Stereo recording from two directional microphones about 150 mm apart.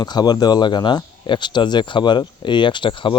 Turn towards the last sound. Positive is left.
turn(degrees=35)  # may be behind; listen again after turning